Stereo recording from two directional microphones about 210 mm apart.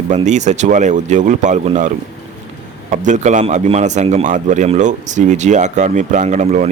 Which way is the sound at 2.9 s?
35° right (ahead or behind).